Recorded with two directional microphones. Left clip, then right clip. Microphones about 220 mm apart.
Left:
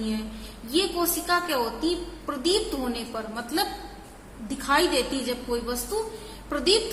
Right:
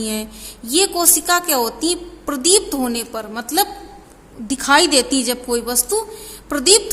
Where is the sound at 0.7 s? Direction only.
50° right (ahead or behind).